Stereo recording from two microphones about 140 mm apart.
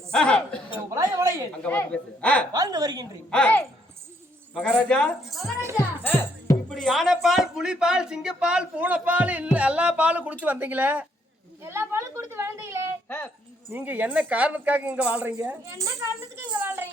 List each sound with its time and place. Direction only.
0.1 s a man's voice: 5° left (ahead or behind)
0.9 s a sound: 25° right (ahead or behind)
1.6 s a man's voice: 10° left (ahead or behind)
2.5 s speech: 25° right (ahead or behind)
3.2 s a man's voice: 10° left (ahead or behind)
5.3 s speech: centre (ahead or behind)
5.7 s music: 15° left (ahead or behind)
6.7 s speech: 5° left (ahead or behind)
11.6 s a sound: 15° right (ahead or behind)
13.1 s a sound: 15° left (ahead or behind)
13.7 s speech: 15° right (ahead or behind)
15.3 s speech: 20° right (ahead or behind)
16.5 s a sound: 15° right (ahead or behind)